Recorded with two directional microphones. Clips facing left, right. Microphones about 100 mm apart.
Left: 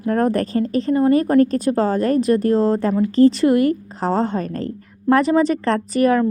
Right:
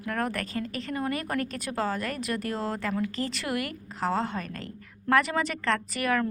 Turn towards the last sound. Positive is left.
turn(degrees=30)  # may be behind; listen again after turning